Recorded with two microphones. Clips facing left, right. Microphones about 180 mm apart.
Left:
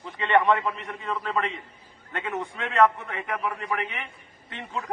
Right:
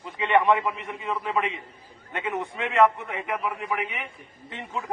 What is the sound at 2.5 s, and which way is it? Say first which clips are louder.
A man's voice: right 1 dB; 15° right (ahead or behind).